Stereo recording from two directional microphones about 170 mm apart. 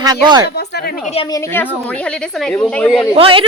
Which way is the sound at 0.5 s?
70° left (ahead or behind).